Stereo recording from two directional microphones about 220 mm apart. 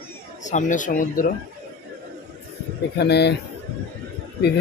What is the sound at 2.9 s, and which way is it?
Speech, 50° left (ahead or behind).